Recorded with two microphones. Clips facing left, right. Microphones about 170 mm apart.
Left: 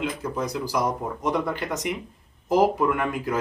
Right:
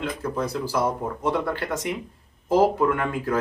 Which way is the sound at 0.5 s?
15° left (ahead or behind).